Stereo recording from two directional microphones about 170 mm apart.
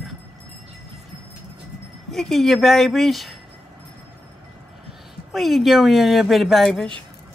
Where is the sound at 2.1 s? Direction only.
Centre (ahead or behind).